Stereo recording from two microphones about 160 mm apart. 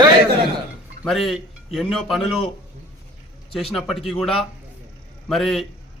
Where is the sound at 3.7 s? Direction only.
Centre (ahead or behind).